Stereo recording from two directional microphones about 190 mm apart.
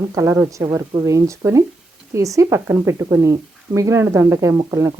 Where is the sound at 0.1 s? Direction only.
15° right (ahead or behind).